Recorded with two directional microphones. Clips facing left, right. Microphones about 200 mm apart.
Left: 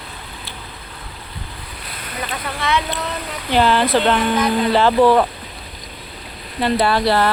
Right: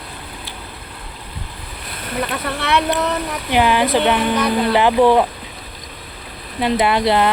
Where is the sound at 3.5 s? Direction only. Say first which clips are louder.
Even; 15° right (ahead or behind).